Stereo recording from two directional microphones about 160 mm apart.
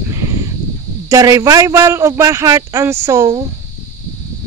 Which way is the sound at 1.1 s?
20° right (ahead or behind).